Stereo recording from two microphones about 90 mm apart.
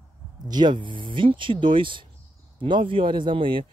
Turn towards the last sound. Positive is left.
turn(degrees=-70)  # may be behind; listen again after turning